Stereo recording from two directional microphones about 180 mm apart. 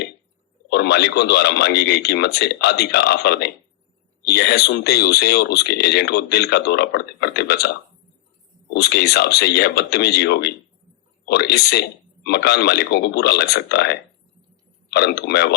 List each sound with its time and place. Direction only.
0.7 s speech: 65° left (ahead or behind)
8.7 s a man's voice: 65° left (ahead or behind)